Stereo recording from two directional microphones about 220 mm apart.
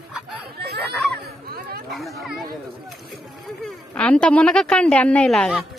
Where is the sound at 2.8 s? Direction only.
Centre (ahead or behind).